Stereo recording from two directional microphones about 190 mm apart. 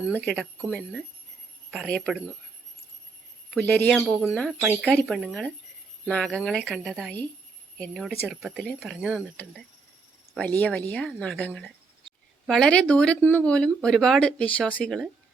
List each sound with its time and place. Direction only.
0.1 s speech: 10° left (ahead or behind)
3.5 s speech: 5° left (ahead or behind)